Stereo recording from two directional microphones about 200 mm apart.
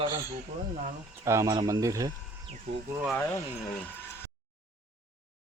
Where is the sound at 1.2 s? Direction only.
15° right (ahead or behind).